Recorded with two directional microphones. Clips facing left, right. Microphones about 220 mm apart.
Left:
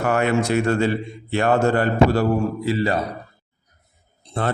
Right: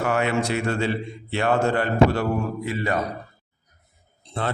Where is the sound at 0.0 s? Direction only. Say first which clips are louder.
Left 3 dB; 45° left (ahead or behind).